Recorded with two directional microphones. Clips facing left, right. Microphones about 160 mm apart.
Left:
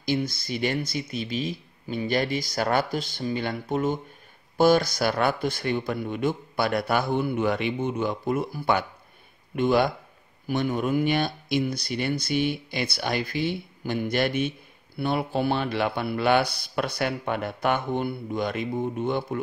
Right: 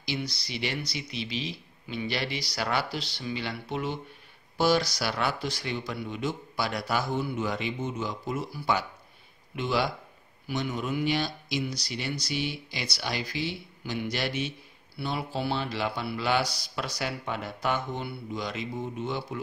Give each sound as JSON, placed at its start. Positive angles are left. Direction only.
{"t": 0.0, "sound": "speech", "side_deg": 50}